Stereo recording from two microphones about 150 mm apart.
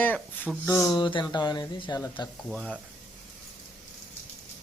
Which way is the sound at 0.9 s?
30° left (ahead or behind).